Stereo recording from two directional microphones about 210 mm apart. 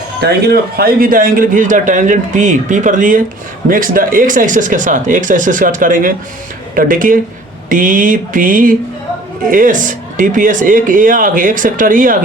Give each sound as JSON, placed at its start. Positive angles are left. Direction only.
{"t": 0.2, "sound": "speech", "side_deg": -50}